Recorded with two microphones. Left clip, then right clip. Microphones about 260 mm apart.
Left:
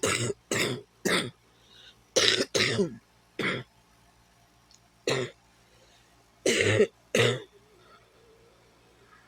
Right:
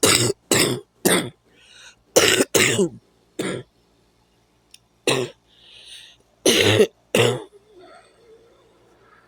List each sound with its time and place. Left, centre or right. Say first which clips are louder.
0.0 s throat clearing: right 11 dB; right
3.3 s cough: right 3 dB; right
5.0 s cough: right 8 dB; right
6.4 s cough: right 8 dB; right